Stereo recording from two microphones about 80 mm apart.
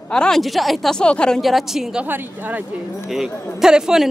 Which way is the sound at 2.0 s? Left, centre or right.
Right.